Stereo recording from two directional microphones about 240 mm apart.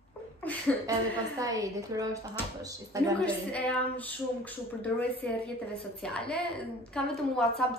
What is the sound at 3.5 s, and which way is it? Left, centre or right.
A woman's voice, centre.